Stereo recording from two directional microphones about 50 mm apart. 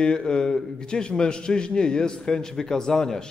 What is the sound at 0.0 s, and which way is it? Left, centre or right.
A man's voice, centre.